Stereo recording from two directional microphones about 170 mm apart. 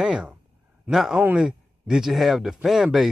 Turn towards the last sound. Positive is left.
turn(degrees=0)  # may be behind; listen again after turning